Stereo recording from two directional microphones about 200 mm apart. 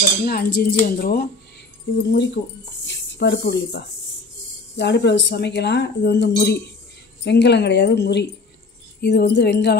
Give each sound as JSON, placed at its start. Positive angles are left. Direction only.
{"t": 0.2, "sound": "cutlery", "side_deg": 50}
{"t": 2.0, "sound": "speech", "side_deg": 60}